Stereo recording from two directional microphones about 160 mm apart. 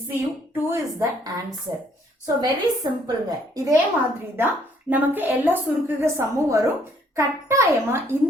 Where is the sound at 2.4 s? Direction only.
25° right (ahead or behind).